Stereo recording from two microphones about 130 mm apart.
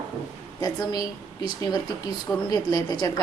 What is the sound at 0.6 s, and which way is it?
A woman's voice, 30° left (ahead or behind).